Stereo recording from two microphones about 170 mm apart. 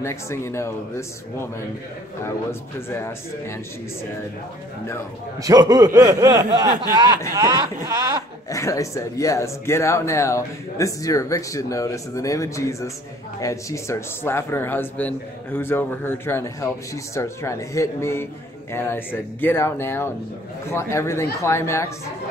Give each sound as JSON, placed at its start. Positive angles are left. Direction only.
{"t": 0.0, "sound": "speech", "side_deg": 15}
{"t": 2.9, "sound": "speech", "side_deg": 15}
{"t": 5.4, "sound": "a sound", "side_deg": -20}
{"t": 8.5, "sound": "speech", "side_deg": 20}